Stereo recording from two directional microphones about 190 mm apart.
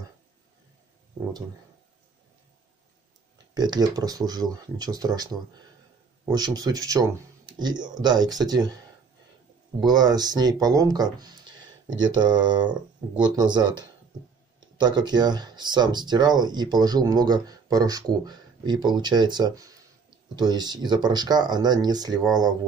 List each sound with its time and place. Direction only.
3.5 s speech: 20° right (ahead or behind)
9.8 s speech: 20° right (ahead or behind)